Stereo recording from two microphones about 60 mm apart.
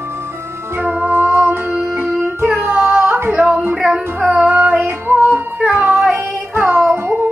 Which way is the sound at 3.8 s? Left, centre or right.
Centre.